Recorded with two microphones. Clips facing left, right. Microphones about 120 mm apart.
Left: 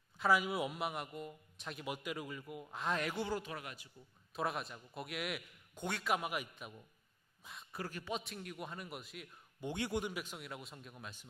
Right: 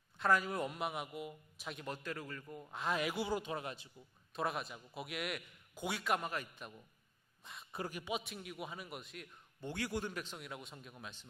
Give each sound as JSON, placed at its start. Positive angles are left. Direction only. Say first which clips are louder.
{"t": 0.2, "sound": "a man's voice", "louder": "left 1 dB", "side_deg": 5}
{"t": 1.9, "sound": "a man's voice", "louder": "left 2 dB", "side_deg": 15}
{"t": 4.4, "sound": "a man's voice", "louder": "even", "side_deg": 0}
{"t": 7.4, "sound": "a sound", "louder": "even", "side_deg": 0}
{"t": 7.7, "sound": "speech", "louder": "right 1 dB", "side_deg": -20}
{"t": 8.2, "sound": "a man's voice", "louder": "even", "side_deg": 0}
{"t": 9.6, "sound": "a man's voice", "louder": "left 2 dB", "side_deg": 20}
{"t": 10.1, "sound": "a man's voice", "louder": "even", "side_deg": 5}